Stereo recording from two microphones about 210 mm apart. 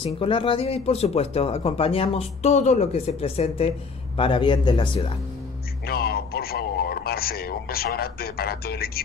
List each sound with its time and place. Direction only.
0.0 s speech: 25° left (ahead or behind)
5.9 s a man's voice: 50° left (ahead or behind)